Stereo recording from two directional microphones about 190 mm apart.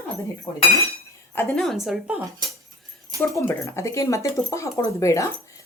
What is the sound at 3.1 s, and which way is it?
Speech, 15° left (ahead or behind).